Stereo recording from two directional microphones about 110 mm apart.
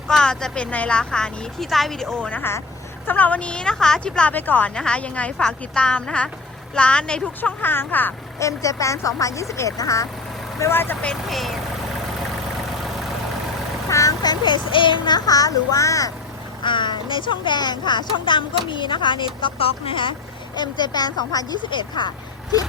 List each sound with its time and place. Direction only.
0.1 s a woman's voice: 5° left (ahead or behind)
8.4 s speech: 30° left (ahead or behind)
10.6 s speech: 20° left (ahead or behind)
11.1 s speech: centre (ahead or behind)
13.9 s a child's voice: 30° left (ahead or behind)
16.6 s speech: 45° left (ahead or behind)
20.6 s speech: 40° left (ahead or behind)